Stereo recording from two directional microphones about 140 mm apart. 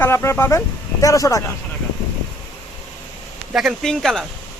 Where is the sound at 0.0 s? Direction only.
15° left (ahead or behind).